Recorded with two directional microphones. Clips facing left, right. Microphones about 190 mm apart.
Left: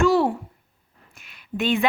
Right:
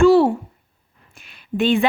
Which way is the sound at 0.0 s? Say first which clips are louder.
Right 6 dB; 30° right (ahead or behind).